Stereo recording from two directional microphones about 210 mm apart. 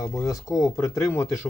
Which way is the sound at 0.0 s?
15° left (ahead or behind).